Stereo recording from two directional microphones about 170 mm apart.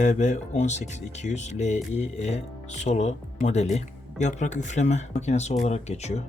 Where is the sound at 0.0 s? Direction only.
45° left (ahead or behind).